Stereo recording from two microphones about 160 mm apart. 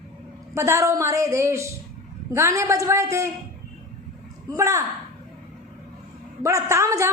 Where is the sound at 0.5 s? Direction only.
15° right (ahead or behind).